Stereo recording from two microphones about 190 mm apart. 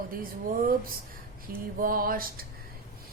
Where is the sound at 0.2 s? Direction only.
50° right (ahead or behind).